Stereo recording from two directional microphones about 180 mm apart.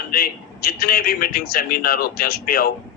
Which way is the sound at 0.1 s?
55° left (ahead or behind).